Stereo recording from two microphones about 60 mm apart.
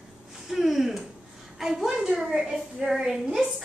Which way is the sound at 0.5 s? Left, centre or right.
Centre.